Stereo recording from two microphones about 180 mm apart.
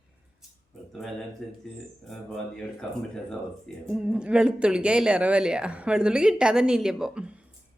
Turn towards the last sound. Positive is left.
turn(degrees=-5)  # may be behind; listen again after turning